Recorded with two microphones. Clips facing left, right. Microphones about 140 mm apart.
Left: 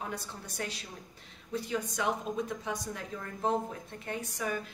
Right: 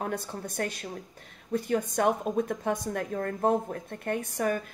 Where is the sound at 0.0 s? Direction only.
50° right (ahead or behind).